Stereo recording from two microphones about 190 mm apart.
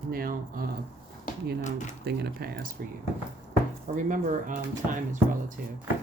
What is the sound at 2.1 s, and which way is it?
Speech, 55° right (ahead or behind).